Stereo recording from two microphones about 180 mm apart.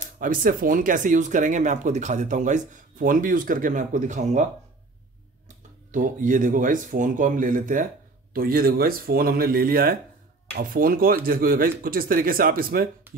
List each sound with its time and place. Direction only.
0.2 s speech: 50° right (ahead or behind)
5.9 s speech: 45° right (ahead or behind)